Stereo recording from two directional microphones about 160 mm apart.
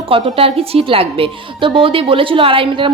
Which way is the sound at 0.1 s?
35° right (ahead or behind).